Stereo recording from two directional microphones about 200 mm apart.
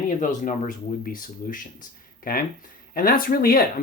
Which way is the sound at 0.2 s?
40° left (ahead or behind).